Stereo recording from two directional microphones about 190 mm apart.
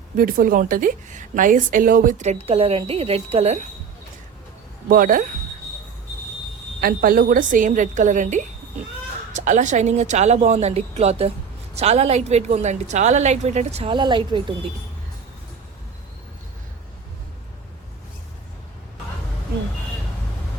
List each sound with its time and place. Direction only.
0.2 s a woman's voice: 50° right (ahead or behind)
4.9 s speech: 45° right (ahead or behind)
6.8 s a woman's voice: 50° right (ahead or behind); by 14.7 s 25° right (ahead or behind)